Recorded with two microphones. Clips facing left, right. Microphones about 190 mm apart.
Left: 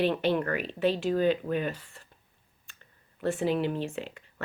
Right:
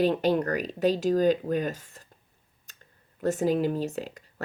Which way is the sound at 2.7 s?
40° right (ahead or behind).